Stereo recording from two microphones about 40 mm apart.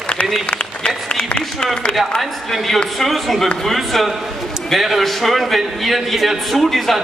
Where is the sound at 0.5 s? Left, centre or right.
Left.